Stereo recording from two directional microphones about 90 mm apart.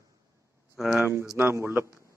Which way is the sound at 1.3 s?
25° right (ahead or behind).